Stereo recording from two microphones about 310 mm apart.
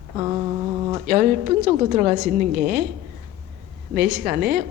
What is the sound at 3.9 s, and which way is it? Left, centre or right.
Speech, right.